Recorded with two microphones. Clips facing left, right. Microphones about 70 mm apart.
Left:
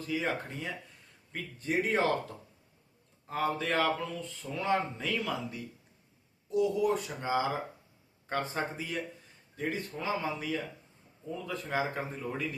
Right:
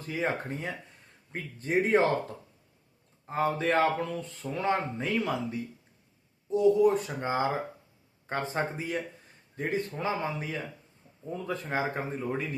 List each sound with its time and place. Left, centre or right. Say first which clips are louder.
0.1 s speech: right 3 dB; right
3.2 s speech: right 4 dB; right
8.3 s speech: right 2 dB; right